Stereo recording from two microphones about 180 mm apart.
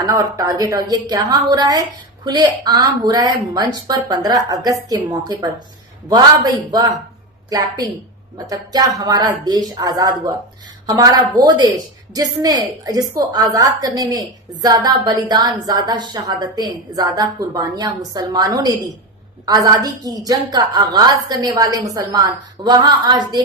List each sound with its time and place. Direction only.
0.0 s a woman's voice: 20° right (ahead or behind)
8.4 s a woman's voice: 20° right (ahead or behind)